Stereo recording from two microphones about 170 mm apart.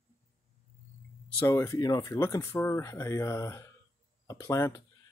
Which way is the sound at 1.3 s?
15° left (ahead or behind).